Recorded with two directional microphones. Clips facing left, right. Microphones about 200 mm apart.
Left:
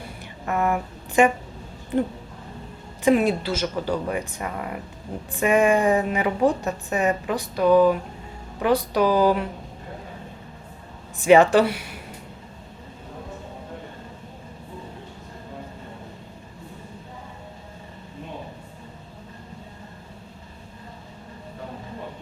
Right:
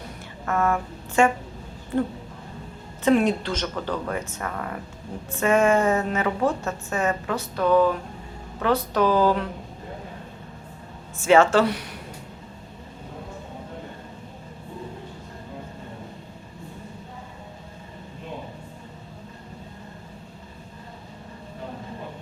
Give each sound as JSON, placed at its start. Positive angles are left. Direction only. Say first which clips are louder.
{"t": 0.4, "sound": "a sound", "louder": "even", "side_deg": 15}
{"t": 3.0, "sound": "a woman's voice", "louder": "left 1 dB", "side_deg": 10}
{"t": 11.2, "sound": "a woman's voice", "louder": "left 2 dB", "side_deg": 15}